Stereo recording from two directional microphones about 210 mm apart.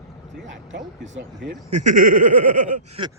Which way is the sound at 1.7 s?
35° right (ahead or behind).